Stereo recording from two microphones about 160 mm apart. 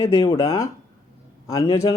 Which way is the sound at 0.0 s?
20° left (ahead or behind).